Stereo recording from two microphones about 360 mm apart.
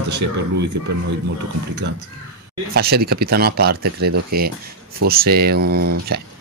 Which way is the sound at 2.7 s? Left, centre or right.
Right.